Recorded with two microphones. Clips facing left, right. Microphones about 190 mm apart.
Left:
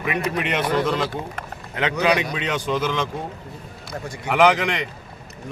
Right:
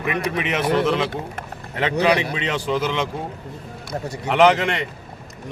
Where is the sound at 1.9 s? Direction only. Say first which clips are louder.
Right 2 dB; 30° right (ahead or behind).